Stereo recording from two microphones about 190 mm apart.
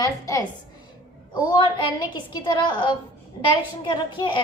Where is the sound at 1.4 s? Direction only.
25° left (ahead or behind).